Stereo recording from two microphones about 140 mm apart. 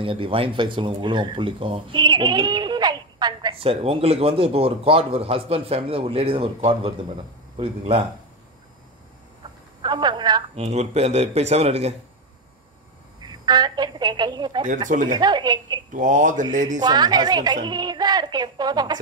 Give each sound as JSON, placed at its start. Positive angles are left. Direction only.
{"t": 0.0, "sound": "speech", "side_deg": -40}
{"t": 3.5, "sound": "speech", "side_deg": -45}
{"t": 9.4, "sound": "telephone", "side_deg": -35}
{"t": 10.5, "sound": "speech", "side_deg": -50}
{"t": 13.2, "sound": "a woman's voice", "side_deg": -30}
{"t": 15.9, "sound": "speech", "side_deg": -65}
{"t": 16.8, "sound": "a woman's voice", "side_deg": -30}